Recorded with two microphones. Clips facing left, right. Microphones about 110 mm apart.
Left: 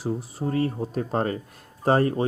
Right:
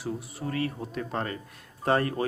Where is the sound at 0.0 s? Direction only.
30° left (ahead or behind).